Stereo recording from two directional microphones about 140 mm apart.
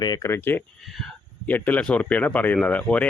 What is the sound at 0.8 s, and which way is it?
Speech, centre (ahead or behind).